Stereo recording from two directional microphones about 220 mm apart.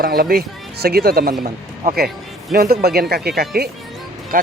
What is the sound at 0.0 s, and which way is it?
Speech, 45° right (ahead or behind).